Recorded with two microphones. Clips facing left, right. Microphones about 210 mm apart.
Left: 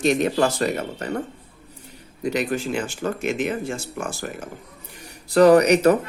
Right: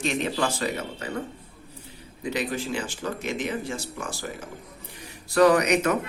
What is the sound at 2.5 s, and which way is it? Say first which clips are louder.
Speech: left 4 dB; 50° left (ahead or behind).